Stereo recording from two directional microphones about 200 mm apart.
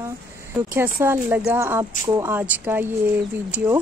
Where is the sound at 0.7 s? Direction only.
10° right (ahead or behind).